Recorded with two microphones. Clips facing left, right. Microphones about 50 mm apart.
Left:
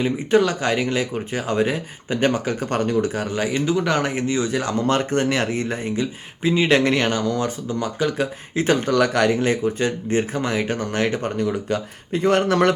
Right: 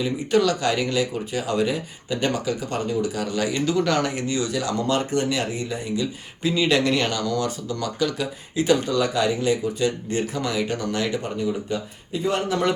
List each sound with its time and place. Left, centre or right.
0.0 s speech: left
3.2 s speech: left
6.4 s speech: left
9.0 s speech: left
11.3 s speech: left